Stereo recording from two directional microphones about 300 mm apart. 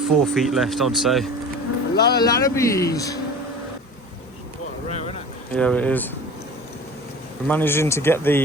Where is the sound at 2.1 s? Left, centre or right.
Centre.